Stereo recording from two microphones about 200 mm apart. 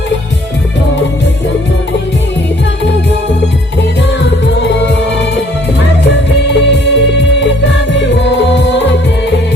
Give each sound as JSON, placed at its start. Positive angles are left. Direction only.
{"t": 6.1, "sound": "music", "side_deg": 60}